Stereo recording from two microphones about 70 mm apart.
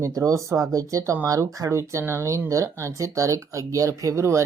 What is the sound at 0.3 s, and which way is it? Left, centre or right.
Speech, right.